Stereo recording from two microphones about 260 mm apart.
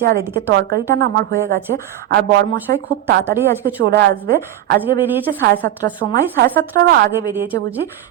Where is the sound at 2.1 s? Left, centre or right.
Right.